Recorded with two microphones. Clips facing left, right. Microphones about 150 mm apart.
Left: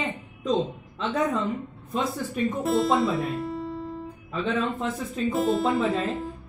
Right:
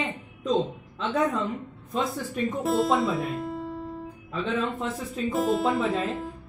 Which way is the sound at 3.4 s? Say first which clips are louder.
Left 1 dB; 10° right (ahead or behind).